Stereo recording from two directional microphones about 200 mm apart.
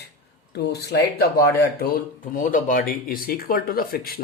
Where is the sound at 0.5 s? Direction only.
55° left (ahead or behind).